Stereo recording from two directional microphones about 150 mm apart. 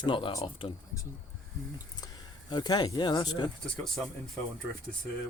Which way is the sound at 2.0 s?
30° left (ahead or behind).